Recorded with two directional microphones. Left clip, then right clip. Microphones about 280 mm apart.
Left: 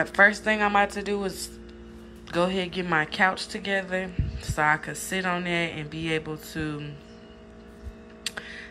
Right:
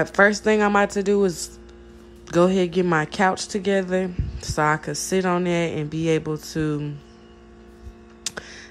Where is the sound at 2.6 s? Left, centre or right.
Right.